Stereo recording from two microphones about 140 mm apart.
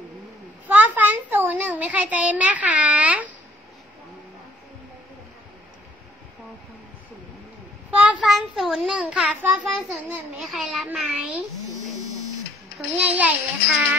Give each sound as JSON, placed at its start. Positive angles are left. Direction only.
{"t": 0.7, "sound": "a sound", "side_deg": -10}
{"t": 8.0, "sound": "a child's voice", "side_deg": -5}
{"t": 12.7, "sound": "a child's voice", "side_deg": -10}